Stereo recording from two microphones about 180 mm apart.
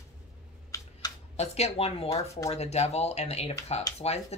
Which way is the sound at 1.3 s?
35° left (ahead or behind).